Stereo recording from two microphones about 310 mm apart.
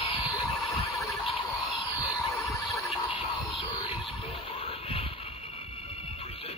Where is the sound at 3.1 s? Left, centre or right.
Centre.